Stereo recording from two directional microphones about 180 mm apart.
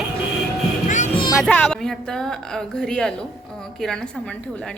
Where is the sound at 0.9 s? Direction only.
40° left (ahead or behind).